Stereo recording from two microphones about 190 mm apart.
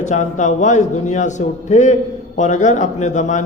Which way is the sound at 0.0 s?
40° left (ahead or behind).